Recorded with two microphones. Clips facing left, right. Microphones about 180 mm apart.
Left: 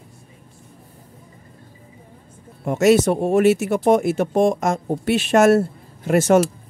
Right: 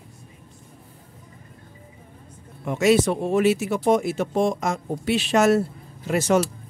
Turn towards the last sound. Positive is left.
turn(degrees=50)  # may be behind; listen again after turning